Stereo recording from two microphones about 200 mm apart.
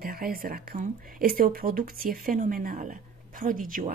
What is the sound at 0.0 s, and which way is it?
Speech, 45° right (ahead or behind).